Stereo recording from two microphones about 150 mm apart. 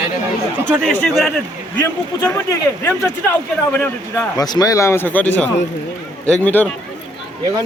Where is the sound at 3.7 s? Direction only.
10° left (ahead or behind).